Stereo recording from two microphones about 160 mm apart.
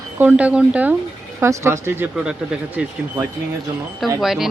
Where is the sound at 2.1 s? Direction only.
5° right (ahead or behind).